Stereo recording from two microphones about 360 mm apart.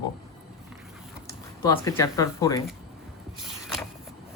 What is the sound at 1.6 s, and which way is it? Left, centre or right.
Speech, centre.